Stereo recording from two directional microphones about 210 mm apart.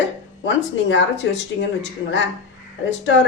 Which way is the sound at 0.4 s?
60° left (ahead or behind).